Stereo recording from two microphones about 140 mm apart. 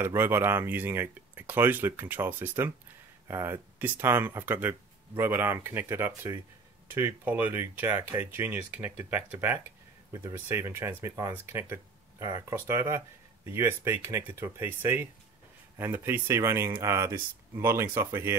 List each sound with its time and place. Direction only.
0.0 s speech: 15° right (ahead or behind)